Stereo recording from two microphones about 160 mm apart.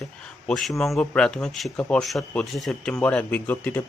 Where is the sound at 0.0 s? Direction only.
Centre (ahead or behind).